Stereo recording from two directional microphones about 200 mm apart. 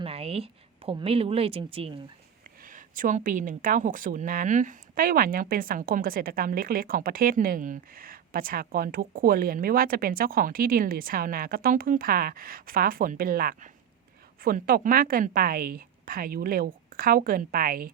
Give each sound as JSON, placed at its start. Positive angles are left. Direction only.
{"t": 0.0, "sound": "a woman's voice", "side_deg": -30}
{"t": 2.6, "sound": "a woman's voice", "side_deg": -40}